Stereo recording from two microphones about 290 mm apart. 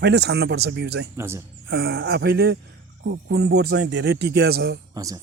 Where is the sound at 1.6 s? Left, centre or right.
Right.